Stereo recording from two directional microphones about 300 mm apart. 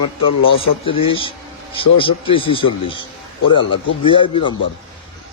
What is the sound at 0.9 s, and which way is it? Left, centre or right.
Speech, centre.